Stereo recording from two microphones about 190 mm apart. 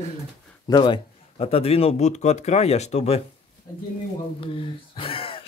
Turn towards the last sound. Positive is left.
turn(degrees=30)  # may be behind; listen again after turning